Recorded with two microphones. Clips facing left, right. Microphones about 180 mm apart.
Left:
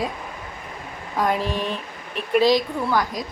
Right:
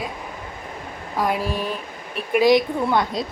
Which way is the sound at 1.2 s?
10° right (ahead or behind).